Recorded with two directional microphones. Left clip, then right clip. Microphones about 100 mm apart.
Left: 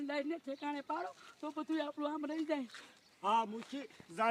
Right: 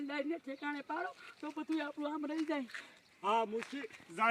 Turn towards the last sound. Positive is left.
turn(degrees=40)  # may be behind; listen again after turning